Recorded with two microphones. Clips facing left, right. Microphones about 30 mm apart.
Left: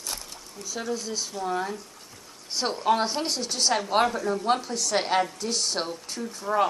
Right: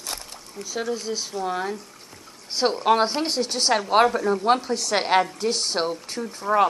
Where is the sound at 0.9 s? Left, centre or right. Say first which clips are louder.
Right 3 dB; centre.